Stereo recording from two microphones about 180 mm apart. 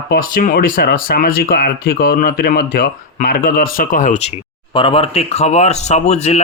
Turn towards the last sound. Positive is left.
turn(degrees=40)  # may be behind; listen again after turning